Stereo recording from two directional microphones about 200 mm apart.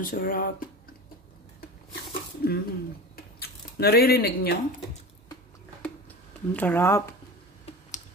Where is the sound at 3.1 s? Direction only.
50° left (ahead or behind).